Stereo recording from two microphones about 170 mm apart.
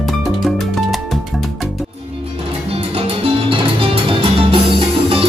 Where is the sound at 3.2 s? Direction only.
35° right (ahead or behind).